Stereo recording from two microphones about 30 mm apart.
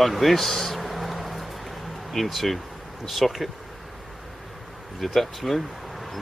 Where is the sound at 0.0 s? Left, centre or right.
Centre.